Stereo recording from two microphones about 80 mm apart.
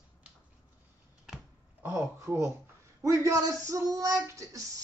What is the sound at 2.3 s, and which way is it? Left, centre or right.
Speech, right.